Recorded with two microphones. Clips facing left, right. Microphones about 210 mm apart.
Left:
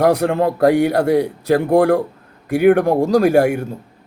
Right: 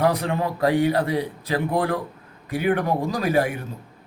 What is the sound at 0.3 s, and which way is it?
Speech, 75° left (ahead or behind).